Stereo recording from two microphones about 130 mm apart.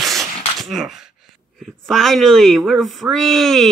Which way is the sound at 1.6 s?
Centre (ahead or behind).